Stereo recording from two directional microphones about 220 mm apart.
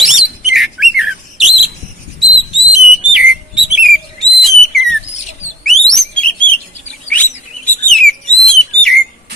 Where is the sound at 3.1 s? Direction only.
5° right (ahead or behind).